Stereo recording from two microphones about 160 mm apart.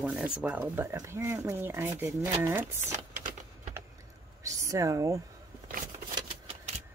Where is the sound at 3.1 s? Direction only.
55° right (ahead or behind).